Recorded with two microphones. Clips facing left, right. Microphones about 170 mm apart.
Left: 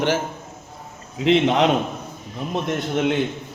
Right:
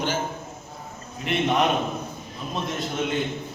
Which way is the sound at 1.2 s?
90° left.